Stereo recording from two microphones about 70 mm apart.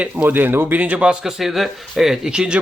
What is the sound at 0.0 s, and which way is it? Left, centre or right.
Speech, right.